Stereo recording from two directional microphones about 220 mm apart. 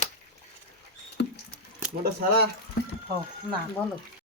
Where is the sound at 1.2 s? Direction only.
50° left (ahead or behind).